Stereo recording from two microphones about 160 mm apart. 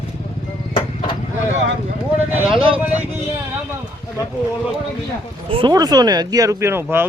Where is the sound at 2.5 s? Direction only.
35° right (ahead or behind).